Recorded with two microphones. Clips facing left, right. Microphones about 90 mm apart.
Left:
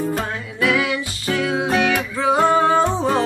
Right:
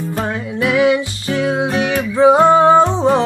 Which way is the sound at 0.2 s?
25° right (ahead or behind).